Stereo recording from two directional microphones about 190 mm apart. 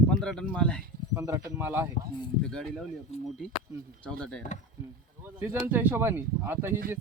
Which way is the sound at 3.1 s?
35° left (ahead or behind).